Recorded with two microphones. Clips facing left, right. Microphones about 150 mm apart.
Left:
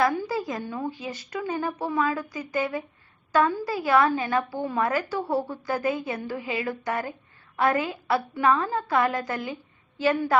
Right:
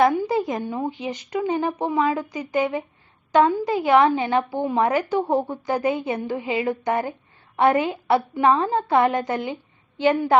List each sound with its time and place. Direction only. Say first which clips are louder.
0.0 s a woman's voice: right 5 dB; 20° right (ahead or behind)